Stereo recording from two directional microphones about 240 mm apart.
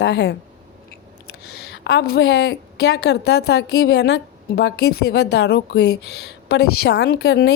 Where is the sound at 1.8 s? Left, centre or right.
Left.